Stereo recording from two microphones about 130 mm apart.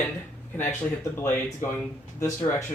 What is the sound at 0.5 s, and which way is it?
Speech, 15° left (ahead or behind).